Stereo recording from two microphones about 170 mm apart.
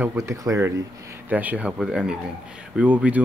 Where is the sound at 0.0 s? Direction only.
15° right (ahead or behind).